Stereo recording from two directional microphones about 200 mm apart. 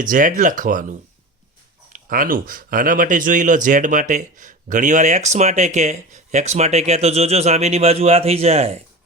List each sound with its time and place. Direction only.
0.0 s speech: 40° right (ahead or behind)